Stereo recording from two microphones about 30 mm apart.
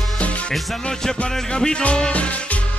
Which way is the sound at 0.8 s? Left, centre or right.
Left.